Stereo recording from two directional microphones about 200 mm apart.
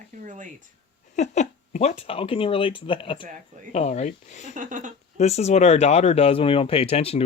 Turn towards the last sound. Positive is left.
turn(degrees=30)  # may be behind; listen again after turning